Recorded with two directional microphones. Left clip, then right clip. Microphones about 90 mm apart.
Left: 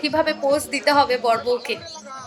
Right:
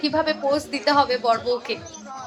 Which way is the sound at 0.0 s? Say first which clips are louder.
Left 2 dB; 15° left (ahead or behind).